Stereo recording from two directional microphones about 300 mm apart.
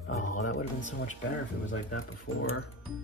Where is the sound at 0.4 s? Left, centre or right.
Left.